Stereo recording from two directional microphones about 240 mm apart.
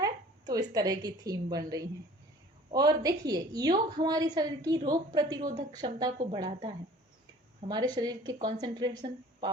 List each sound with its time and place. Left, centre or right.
0.0 s a sound: centre
0.7 s a woman's voice: centre
5.4 s a woman's voice: right
5.7 s a woman's voice: centre
7.7 s a woman's voice: centre